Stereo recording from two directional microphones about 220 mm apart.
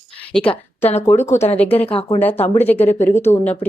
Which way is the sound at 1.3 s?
30° left (ahead or behind).